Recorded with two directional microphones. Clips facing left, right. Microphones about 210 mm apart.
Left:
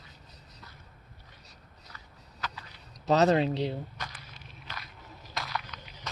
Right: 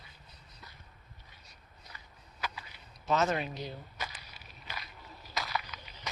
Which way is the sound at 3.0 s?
35° left (ahead or behind).